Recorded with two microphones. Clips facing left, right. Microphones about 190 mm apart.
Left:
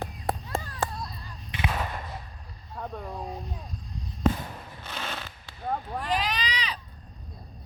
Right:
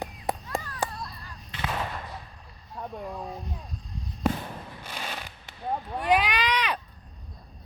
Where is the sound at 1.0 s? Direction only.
15° left (ahead or behind).